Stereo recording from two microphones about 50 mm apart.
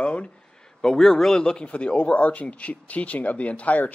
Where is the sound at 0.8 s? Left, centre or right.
Centre.